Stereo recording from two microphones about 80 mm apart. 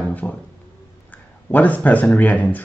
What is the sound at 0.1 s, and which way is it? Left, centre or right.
Speech, centre.